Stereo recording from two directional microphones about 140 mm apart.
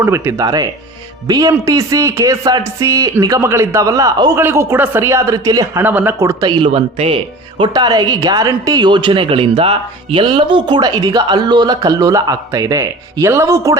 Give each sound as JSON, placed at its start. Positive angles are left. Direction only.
{"t": 0.0, "sound": "speech", "side_deg": -20}
{"t": 5.8, "sound": "speech", "side_deg": -10}
{"t": 6.7, "sound": "speech", "side_deg": -45}
{"t": 7.6, "sound": "speech", "side_deg": -30}